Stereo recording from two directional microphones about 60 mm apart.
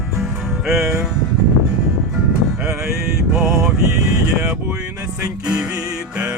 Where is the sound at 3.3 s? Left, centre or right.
Centre.